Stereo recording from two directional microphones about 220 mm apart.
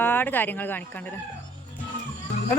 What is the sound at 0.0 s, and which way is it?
Speech, 10° left (ahead or behind).